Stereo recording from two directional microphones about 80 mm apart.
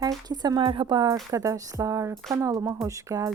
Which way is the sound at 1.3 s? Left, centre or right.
Right.